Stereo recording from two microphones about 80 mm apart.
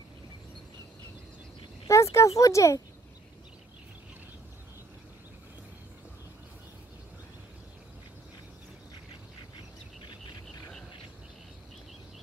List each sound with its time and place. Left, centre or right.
1.9 s speech: left